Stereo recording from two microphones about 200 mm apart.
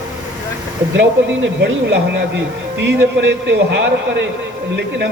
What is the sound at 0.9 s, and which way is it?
Speech, 60° right (ahead or behind).